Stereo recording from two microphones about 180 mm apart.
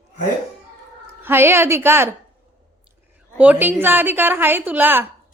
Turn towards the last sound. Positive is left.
turn(degrees=-10)  # may be behind; listen again after turning